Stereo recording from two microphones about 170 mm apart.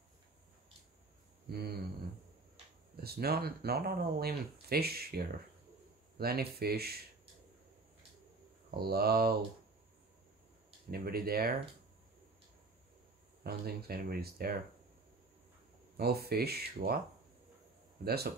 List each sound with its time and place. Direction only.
1.5 s speech: 70° right (ahead or behind)
3.0 s speech: 65° right (ahead or behind)
8.6 s speech: 65° right (ahead or behind)
10.9 s speech: 65° right (ahead or behind)
13.4 s speech: 65° right (ahead or behind)
16.0 s speech: 65° right (ahead or behind)
18.0 s speech: 70° right (ahead or behind)